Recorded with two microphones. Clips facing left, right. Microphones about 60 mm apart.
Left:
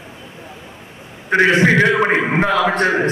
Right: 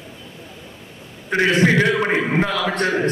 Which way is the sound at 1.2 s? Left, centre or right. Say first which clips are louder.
Left 4 dB; left.